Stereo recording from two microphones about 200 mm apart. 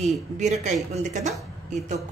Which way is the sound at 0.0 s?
35° right (ahead or behind).